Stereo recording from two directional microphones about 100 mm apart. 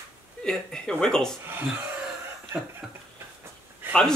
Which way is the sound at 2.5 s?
20° right (ahead or behind).